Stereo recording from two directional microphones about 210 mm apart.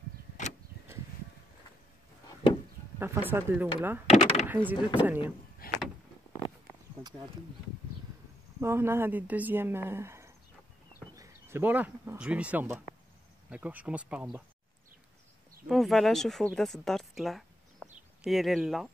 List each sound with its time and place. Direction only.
3.0 s speech: 10° right (ahead or behind)
4.1 s door: 30° left (ahead or behind)
4.5 s speech: 10° right (ahead or behind)
5.6 s vehicle: 45° left (ahead or behind)
8.5 s speech: 10° right (ahead or behind)
15.7 s speech: centre (ahead or behind)